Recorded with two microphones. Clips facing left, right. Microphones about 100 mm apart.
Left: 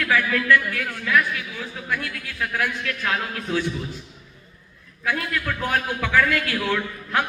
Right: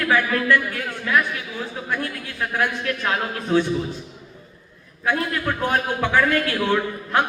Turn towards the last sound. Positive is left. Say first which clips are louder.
# right 4 dB
turn(degrees=-25)  # may be behind; listen again after turning